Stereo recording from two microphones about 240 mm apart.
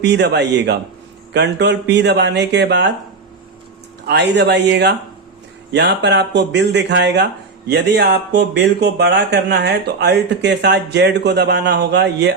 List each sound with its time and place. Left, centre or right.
0.0 s speech: right
4.0 s speech: right